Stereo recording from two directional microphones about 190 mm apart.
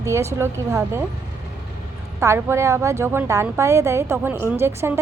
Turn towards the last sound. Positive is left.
turn(degrees=-15)  # may be behind; listen again after turning